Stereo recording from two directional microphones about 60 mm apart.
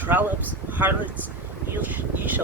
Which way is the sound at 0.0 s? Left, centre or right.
Right.